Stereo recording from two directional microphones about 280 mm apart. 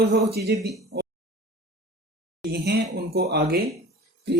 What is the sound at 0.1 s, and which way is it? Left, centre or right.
Speech, right.